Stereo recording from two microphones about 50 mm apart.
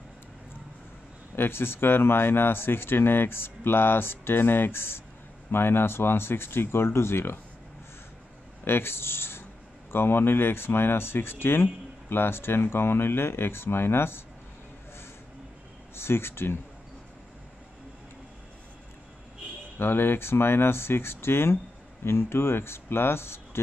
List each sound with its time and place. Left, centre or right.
1.3 s speech: left
8.6 s speech: left
15.9 s speech: left
19.8 s speech: left